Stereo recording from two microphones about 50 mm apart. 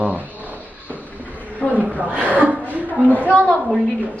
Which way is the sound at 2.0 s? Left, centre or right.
Right.